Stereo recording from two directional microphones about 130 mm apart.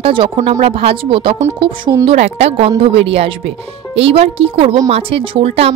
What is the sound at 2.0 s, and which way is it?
A woman's voice, 55° right (ahead or behind).